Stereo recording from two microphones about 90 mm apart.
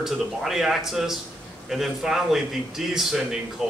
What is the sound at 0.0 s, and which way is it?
Speech, 5° right (ahead or behind).